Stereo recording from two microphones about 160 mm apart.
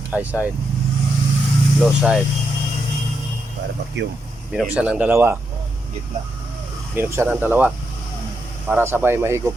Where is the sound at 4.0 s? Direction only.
90° right.